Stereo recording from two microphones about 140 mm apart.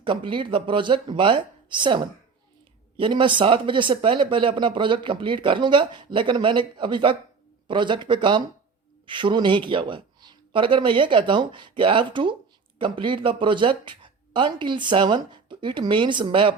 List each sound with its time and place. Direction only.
0.0 s speech: 35° right (ahead or behind)